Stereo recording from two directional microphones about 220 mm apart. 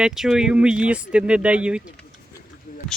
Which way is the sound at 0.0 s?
Centre (ahead or behind).